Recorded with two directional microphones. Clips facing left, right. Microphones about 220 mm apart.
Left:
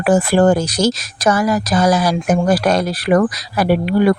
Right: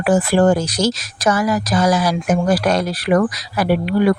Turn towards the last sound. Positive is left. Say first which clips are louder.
# left 2 dB
turn(degrees=40)  # may be behind; listen again after turning